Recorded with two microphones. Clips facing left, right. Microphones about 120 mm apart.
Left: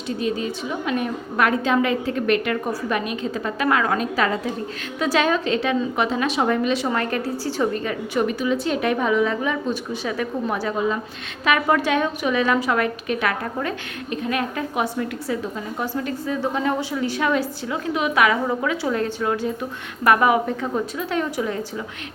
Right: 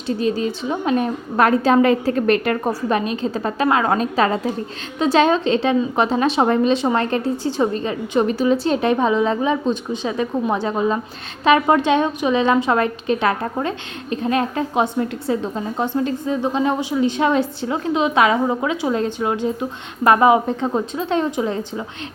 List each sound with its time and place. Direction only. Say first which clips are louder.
0.2 s a woman's voice: right 2 dB; 30° right (ahead or behind)